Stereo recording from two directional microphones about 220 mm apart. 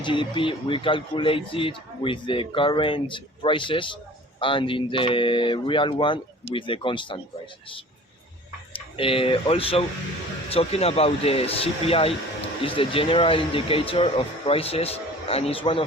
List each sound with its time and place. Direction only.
0.0 s speech: 20° left (ahead or behind)
8.7 s speech: 25° left (ahead or behind)